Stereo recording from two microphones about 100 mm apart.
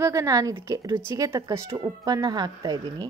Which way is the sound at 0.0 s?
30° right (ahead or behind).